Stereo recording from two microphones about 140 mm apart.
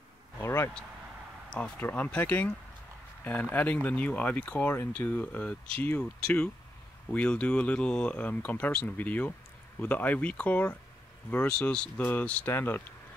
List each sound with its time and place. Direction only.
0.4 s vehicle: 15° left (ahead or behind)
1.5 s speech: 10° left (ahead or behind)